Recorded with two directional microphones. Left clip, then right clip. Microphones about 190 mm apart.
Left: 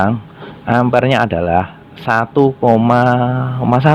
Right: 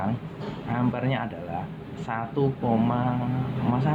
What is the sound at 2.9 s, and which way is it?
Mantra, 55° left (ahead or behind).